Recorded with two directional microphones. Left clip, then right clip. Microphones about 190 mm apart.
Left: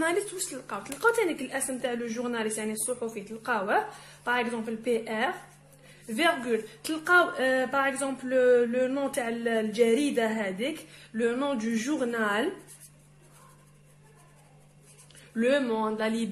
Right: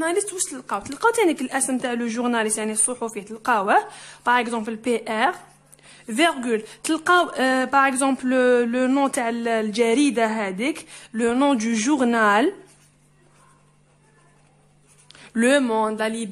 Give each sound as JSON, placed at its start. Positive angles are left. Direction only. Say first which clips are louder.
{"t": 0.5, "sound": "a woman's voice", "louder": "right 8 dB", "side_deg": -35}
{"t": 15.0, "sound": "speech", "louder": "right 6 dB", "side_deg": -50}
{"t": 16.0, "sound": "speech", "louder": "right 4 dB", "side_deg": -20}